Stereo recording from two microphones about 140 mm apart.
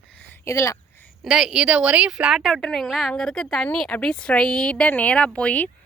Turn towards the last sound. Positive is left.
turn(degrees=10)  # may be behind; listen again after turning